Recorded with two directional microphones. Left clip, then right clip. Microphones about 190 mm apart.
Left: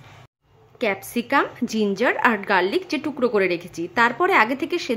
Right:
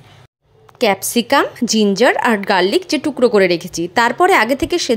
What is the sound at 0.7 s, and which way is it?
A woman's voice, 30° right (ahead or behind).